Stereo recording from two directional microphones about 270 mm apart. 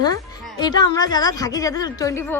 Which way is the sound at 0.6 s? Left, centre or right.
Centre.